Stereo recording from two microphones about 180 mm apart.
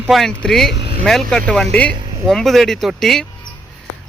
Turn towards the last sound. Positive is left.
turn(degrees=0)  # may be behind; listen again after turning